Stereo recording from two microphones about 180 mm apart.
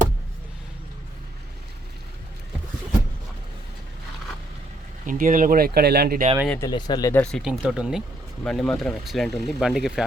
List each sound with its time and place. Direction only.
5.0 s speech: 50° right (ahead or behind)
6.6 s speech: 25° left (ahead or behind)
7.1 s speech: 5° left (ahead or behind)